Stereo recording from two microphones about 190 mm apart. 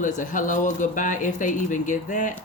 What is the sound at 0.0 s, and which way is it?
Speech, 45° left (ahead or behind).